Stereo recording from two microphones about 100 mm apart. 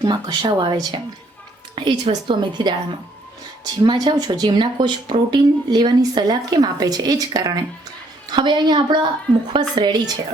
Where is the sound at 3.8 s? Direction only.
45° right (ahead or behind).